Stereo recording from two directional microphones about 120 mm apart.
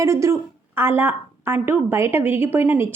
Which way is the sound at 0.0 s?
25° right (ahead or behind).